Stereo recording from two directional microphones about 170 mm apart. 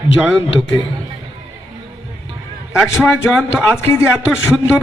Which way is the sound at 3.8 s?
15° left (ahead or behind).